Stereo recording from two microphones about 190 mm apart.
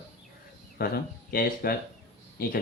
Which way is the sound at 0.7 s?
55° left (ahead or behind).